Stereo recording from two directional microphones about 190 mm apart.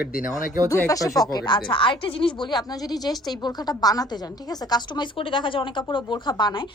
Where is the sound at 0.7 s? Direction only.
15° left (ahead or behind).